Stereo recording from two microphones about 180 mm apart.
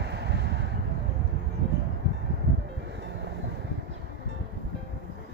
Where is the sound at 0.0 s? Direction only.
70° right (ahead or behind).